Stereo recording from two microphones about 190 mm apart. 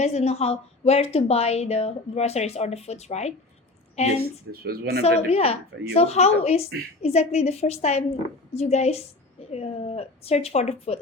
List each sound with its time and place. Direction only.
0.0 s a woman's voice: 35° left (ahead or behind)
4.6 s speech: 55° right (ahead or behind)
5.0 s a woman's voice: 30° left (ahead or behind)